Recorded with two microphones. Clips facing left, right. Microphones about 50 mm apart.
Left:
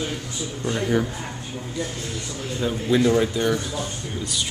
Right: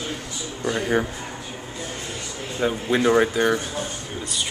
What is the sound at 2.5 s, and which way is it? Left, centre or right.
Speech, right.